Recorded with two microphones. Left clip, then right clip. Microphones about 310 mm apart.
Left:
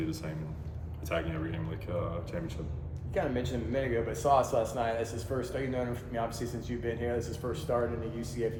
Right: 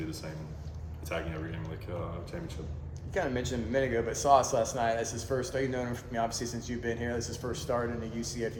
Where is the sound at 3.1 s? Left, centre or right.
Right.